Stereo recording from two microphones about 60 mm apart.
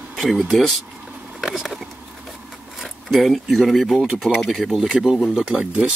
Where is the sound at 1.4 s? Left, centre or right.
Centre.